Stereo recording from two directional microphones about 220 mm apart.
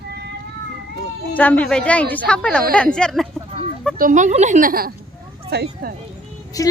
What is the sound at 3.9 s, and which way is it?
A woman's voice, 35° right (ahead or behind).